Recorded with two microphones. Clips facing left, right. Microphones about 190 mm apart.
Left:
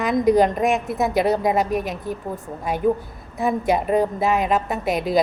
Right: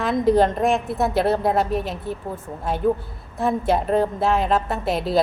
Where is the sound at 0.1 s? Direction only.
15° left (ahead or behind).